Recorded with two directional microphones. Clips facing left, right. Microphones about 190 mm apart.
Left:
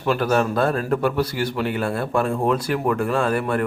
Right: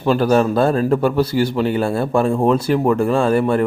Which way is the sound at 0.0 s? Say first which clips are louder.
Right 5 dB; 30° right (ahead or behind).